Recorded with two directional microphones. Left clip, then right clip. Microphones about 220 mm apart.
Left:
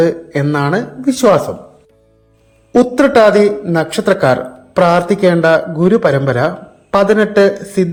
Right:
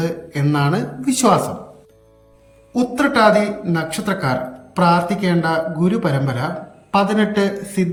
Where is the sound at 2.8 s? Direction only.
15° left (ahead or behind).